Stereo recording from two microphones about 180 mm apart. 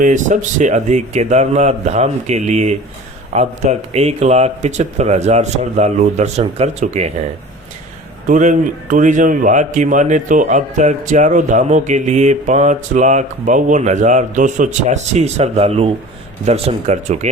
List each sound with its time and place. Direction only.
0.0 s speech: 45° right (ahead or behind)
8.3 s a man's voice: 45° right (ahead or behind)